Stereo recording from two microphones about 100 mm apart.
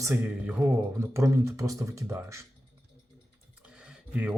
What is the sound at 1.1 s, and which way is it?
Speech, 30° right (ahead or behind).